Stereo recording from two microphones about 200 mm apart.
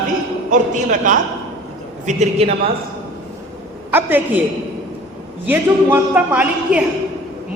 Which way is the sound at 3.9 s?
10° right (ahead or behind).